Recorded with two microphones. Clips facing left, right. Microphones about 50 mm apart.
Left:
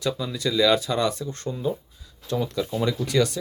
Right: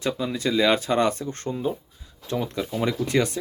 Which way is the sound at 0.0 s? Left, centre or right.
Right.